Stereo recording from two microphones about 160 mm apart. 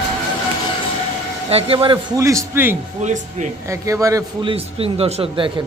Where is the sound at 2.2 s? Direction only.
20° right (ahead or behind).